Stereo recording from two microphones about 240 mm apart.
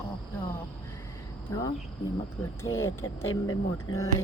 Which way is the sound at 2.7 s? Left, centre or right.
Centre.